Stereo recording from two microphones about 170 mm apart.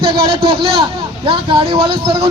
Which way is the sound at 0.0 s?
30° right (ahead or behind).